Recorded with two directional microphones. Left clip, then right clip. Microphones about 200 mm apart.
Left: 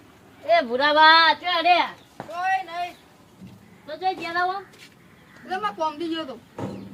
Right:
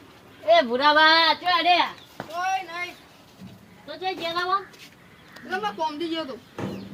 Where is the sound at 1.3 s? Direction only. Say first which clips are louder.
Left 1 dB; centre (ahead or behind).